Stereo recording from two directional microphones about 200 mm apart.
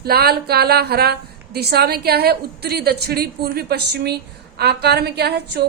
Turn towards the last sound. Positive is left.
turn(degrees=-55)  # may be behind; listen again after turning